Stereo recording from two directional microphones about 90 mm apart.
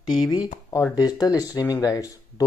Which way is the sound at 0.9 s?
45° left (ahead or behind).